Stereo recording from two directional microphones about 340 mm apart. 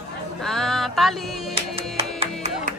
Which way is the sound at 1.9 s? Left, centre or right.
Centre.